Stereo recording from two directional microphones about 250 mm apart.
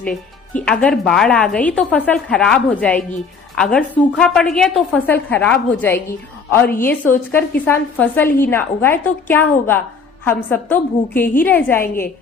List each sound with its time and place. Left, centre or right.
0.0 s a woman's voice: centre